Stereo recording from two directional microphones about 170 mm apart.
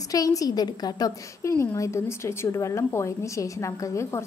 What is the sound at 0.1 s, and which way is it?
A woman's voice, 20° left (ahead or behind).